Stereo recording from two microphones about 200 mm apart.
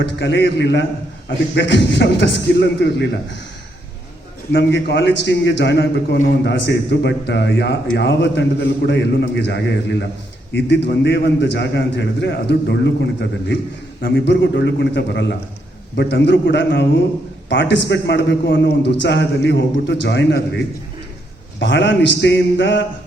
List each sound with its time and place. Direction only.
0.0 s a man's voice: 60° left (ahead or behind)
4.5 s a man's voice: 60° left (ahead or behind)
14.0 s a man's voice: 55° left (ahead or behind)
21.6 s a man's voice: 60° left (ahead or behind)